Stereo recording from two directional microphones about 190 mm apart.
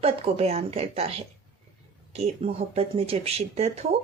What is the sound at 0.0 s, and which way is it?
Speech, 30° right (ahead or behind).